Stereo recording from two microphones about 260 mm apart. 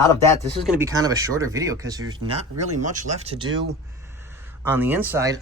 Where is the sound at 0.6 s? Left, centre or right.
Centre.